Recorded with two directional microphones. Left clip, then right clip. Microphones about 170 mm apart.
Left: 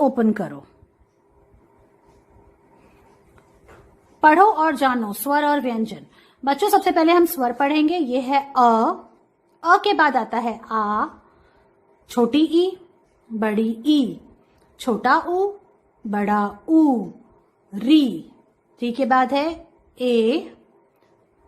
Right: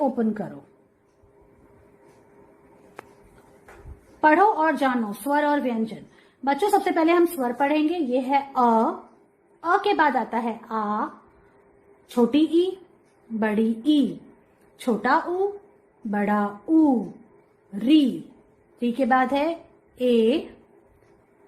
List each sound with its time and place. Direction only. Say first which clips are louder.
0.0 s a woman's voice: left 5 dB; 40° left (ahead or behind)
4.2 s a woman's voice: left 4 dB; 20° left (ahead or behind)